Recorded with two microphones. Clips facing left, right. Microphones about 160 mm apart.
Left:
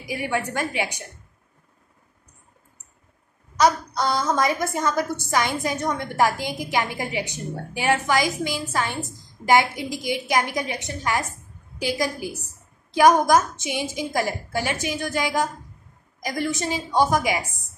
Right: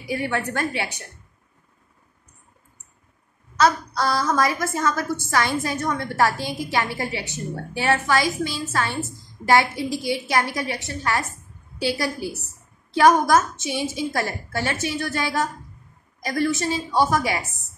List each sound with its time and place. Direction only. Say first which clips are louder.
0.1 s a woman's voice: right 1 dB; 15° left (ahead or behind)
3.5 s a woman's voice: even; 15° left (ahead or behind)